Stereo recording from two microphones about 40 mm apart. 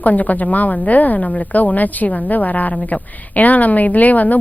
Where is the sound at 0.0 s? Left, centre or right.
Left.